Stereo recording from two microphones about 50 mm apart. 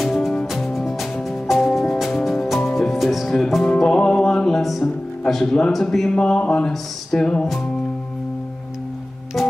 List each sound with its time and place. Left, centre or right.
0.0 s music: centre
5.3 s speech: centre
6.0 s speech: centre
9.4 s music: centre